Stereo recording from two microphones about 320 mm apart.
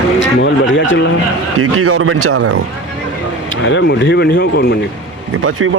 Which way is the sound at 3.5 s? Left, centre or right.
Left.